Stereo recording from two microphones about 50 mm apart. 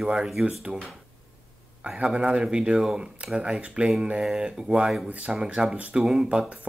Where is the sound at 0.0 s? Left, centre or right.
Centre.